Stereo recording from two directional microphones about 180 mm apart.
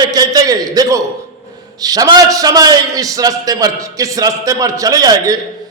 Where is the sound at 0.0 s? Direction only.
20° right (ahead or behind).